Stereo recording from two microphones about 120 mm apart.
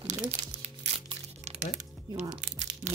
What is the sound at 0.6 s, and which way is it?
Music, 60° right (ahead or behind).